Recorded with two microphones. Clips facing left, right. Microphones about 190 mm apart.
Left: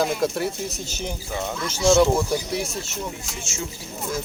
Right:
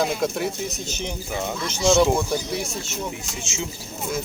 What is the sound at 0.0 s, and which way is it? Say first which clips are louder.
Speech: left 1 dB; 5° left (ahead or behind).